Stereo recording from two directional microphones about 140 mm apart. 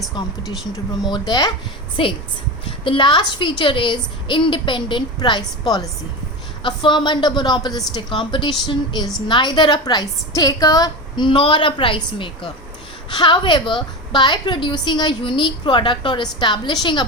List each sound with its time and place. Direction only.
0.2 s a woman's voice: 30° left (ahead or behind)